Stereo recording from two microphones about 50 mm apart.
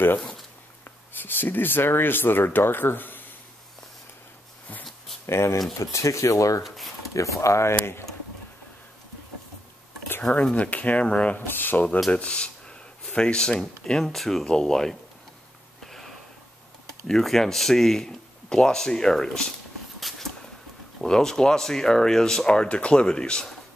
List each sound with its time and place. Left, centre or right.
0.8 s speech: left
5.2 s speech: left
5.8 s speech: left
6.6 s speech: centre
7.2 s speech: left
10.3 s speech: left
11.3 s speech: left
12.1 s speech: left
15.8 s sniff: centre
17.1 s speech: centre
20.0 s a sound: centre
21.0 s speech: centre